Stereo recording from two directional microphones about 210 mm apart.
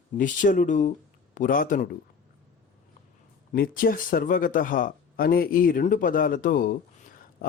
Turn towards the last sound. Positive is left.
turn(degrees=40)  # may be behind; listen again after turning